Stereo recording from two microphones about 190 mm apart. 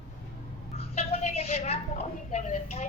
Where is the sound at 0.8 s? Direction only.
35° left (ahead or behind).